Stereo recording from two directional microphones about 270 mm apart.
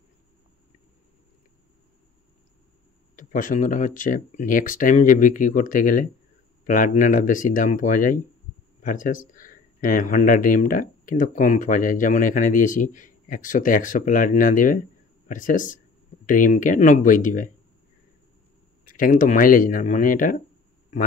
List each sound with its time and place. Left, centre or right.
3.2 s speech: left
18.9 s speech: left